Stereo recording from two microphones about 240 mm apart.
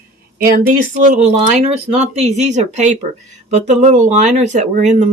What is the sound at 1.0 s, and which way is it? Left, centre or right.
Speech, right.